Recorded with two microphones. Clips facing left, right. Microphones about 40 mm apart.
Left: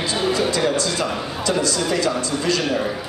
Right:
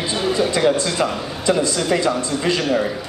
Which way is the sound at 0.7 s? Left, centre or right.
Right.